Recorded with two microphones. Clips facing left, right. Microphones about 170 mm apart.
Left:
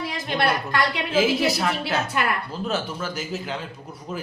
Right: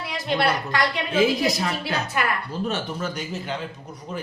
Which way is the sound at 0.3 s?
55° left (ahead or behind).